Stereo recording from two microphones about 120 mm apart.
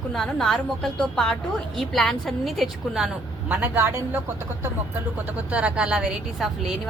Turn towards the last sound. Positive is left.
turn(degrees=-5)  # may be behind; listen again after turning